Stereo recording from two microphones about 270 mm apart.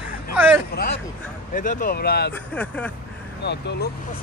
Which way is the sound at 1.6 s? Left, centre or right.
Left.